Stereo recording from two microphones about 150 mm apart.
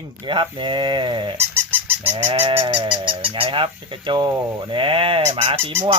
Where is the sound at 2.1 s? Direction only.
50° right (ahead or behind).